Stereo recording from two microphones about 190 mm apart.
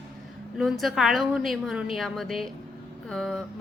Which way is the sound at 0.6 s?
Centre (ahead or behind).